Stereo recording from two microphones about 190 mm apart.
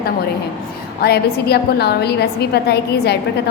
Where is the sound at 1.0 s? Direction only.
55° left (ahead or behind).